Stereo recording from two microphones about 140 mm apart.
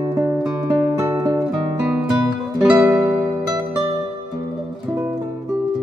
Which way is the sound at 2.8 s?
5° right (ahead or behind).